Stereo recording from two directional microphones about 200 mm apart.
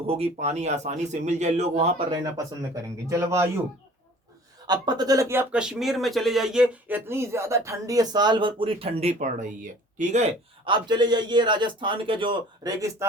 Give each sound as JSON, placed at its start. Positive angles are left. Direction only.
{"t": 0.1, "sound": "a man's voice", "side_deg": -35}
{"t": 3.1, "sound": "speech", "side_deg": -15}
{"t": 4.6, "sound": "speech", "side_deg": -20}
{"t": 10.7, "sound": "a man's voice", "side_deg": -20}